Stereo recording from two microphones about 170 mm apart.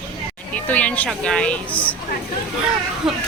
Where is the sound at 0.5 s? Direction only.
10° left (ahead or behind).